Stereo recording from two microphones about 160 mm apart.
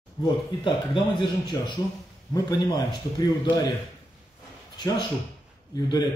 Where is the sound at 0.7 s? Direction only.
30° left (ahead or behind).